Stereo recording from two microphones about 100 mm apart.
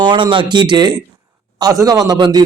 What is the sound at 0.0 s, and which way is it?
Speech, 50° right (ahead or behind).